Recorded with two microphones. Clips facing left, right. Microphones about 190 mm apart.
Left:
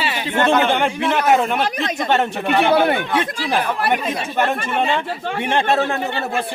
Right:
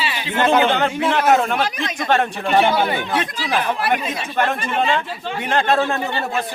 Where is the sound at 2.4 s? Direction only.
60° left (ahead or behind).